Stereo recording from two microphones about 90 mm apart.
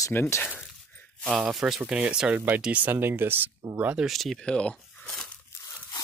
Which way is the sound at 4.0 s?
Centre (ahead or behind).